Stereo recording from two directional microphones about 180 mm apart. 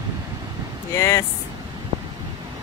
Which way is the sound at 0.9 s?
15° left (ahead or behind).